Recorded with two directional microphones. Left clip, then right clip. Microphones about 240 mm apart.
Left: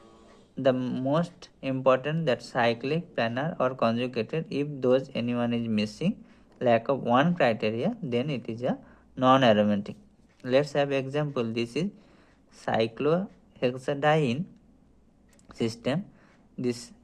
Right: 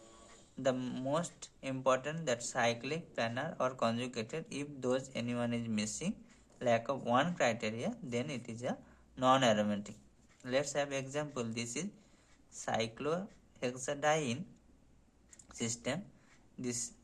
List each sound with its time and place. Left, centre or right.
0.5 s speech: left
15.4 s speech: left